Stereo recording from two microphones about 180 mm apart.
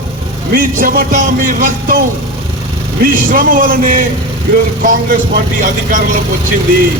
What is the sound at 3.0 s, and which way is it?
Speech, 50° right (ahead or behind).